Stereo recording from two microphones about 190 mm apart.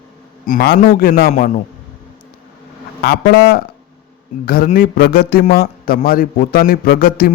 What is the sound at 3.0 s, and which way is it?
A man's voice, 55° left (ahead or behind).